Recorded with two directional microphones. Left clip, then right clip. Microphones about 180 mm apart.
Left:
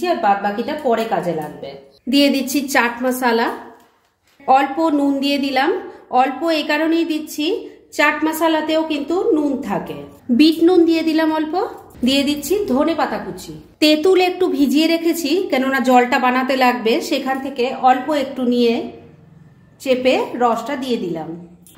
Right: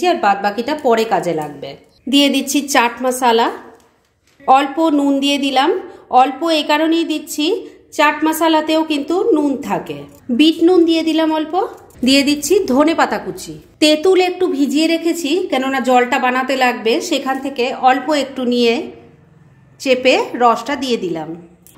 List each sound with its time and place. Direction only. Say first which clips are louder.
0.0 s a woman's voice: right 2 dB; 45° right (ahead or behind)
2.0 s speech: right 2 dB; 20° right (ahead or behind)
10.3 s a woman's voice: right 1 dB; 10° right (ahead or behind)
12.0 s a woman's voice: right 4 dB; 30° right (ahead or behind)
13.7 s a woman's voice: right 2 dB; 15° right (ahead or behind)